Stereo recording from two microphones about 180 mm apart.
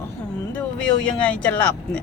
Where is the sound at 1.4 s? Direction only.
10° left (ahead or behind).